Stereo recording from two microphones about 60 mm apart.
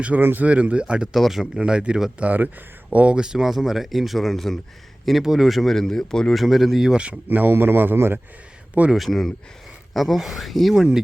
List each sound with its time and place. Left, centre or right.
0.2 s a man's voice: right
0.4 s speech: right
1.1 s speech: centre
1.5 s speech: centre
6.4 s speech: centre
7.3 s a man's voice: right
9.0 s speech: centre